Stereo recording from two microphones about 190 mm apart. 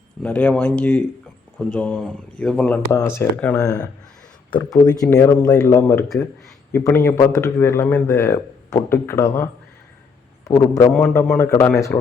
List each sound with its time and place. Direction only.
0.2 s a man's voice: 10° left (ahead or behind)
10.5 s a man's voice: 15° left (ahead or behind)